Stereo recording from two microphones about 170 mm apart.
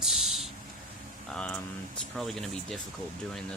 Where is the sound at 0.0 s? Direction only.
Centre (ahead or behind).